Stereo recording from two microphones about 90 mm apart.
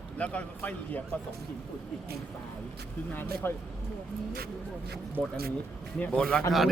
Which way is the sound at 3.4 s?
25° left (ahead or behind).